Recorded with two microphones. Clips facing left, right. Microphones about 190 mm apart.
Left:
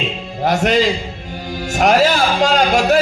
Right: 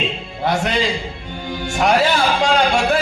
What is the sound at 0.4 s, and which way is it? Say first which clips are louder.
Speech: left 4 dB; 40° left (ahead or behind).